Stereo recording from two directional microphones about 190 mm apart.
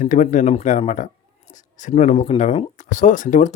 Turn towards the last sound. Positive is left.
turn(degrees=40)  # may be behind; listen again after turning